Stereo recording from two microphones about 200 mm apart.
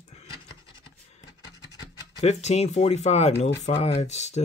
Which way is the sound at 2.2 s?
35° left (ahead or behind).